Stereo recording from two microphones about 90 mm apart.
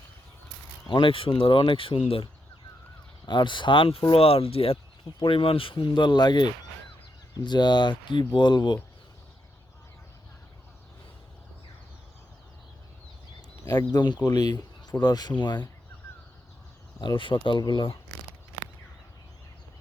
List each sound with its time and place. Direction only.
0.9 s speech: 70° left (ahead or behind); by 2.3 s 85° left
3.2 s speech: 60° left (ahead or behind)
13.7 s speech: 45° left (ahead or behind)
17.0 s speech: 65° left (ahead or behind)